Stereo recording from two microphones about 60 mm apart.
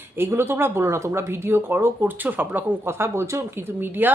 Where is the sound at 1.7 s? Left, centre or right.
Right.